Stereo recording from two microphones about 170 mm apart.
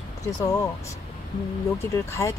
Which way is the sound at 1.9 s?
15° left (ahead or behind).